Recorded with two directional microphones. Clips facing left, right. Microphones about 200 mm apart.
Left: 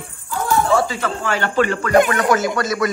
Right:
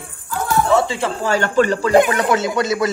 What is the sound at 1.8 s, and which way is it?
Speech, 25° right (ahead or behind).